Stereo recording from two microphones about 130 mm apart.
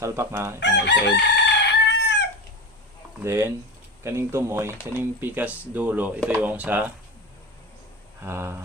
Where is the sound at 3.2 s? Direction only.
20° right (ahead or behind).